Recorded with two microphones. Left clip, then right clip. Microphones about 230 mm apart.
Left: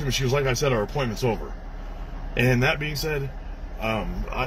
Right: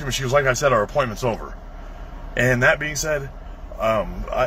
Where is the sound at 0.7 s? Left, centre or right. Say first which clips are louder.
Right 7 dB; right.